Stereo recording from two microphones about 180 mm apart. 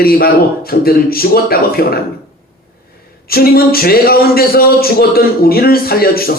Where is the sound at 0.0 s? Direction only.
55° left (ahead or behind).